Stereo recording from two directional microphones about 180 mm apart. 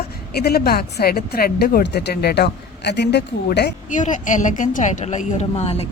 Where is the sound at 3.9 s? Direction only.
45° left (ahead or behind).